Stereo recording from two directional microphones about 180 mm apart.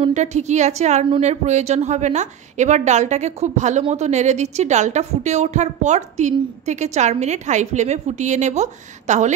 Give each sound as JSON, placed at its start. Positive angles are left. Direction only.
{"t": 0.0, "sound": "a woman's voice", "side_deg": -40}